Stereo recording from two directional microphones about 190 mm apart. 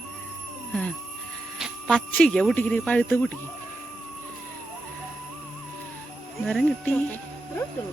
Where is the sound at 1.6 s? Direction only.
Centre (ahead or behind).